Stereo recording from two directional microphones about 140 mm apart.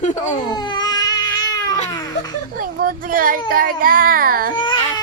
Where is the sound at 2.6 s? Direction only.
90° right.